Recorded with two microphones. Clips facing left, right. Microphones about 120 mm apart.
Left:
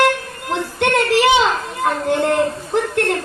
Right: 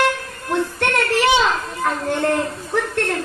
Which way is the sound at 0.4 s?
15° left (ahead or behind).